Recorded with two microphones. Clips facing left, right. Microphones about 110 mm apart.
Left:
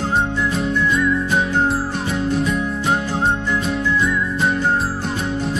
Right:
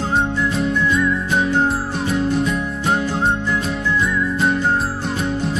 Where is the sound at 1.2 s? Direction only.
Centre (ahead or behind).